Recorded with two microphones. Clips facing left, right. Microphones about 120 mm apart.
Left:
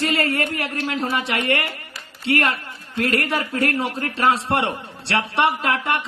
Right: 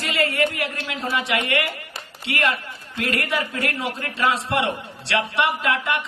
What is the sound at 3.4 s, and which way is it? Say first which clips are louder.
Speech: left 4 dB; 35° left (ahead or behind).